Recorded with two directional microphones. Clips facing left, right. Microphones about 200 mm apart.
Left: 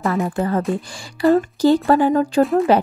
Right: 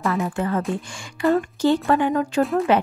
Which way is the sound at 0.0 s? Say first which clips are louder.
Left 3 dB; 35° left (ahead or behind).